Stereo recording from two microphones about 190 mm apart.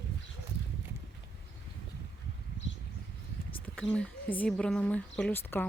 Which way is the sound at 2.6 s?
70° left (ahead or behind).